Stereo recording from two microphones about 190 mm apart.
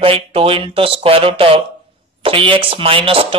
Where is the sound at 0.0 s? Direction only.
30° right (ahead or behind).